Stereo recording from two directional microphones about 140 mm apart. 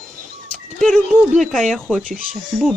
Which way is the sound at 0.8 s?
Centre (ahead or behind).